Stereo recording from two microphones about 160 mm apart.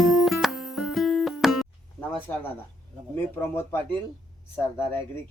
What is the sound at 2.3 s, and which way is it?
Speech, 15° left (ahead or behind).